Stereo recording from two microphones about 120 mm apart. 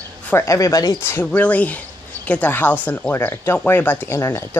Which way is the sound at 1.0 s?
15° left (ahead or behind).